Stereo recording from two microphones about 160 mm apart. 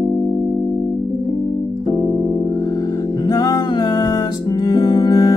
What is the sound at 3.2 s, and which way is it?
Music, 25° left (ahead or behind).